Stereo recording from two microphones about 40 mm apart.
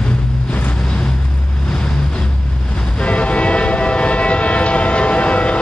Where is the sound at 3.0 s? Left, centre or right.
Left.